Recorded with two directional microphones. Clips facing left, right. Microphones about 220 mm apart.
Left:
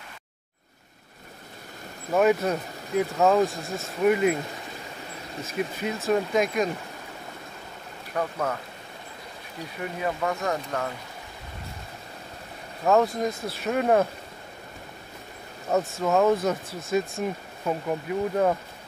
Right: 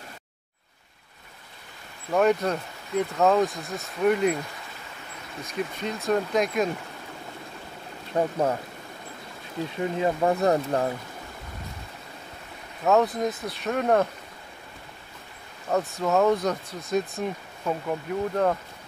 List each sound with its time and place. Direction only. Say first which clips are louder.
2.1 s speech: left 1 dB; 5° left (ahead or behind)
5.4 s speech: left 1 dB; 5° left (ahead or behind)
8.1 s speech: right 4 dB; 25° right (ahead or behind)
9.9 s speech: right 5 dB; 25° right (ahead or behind)
12.8 s speech: even; centre (ahead or behind)
15.7 s speech: left 1 dB; centre (ahead or behind)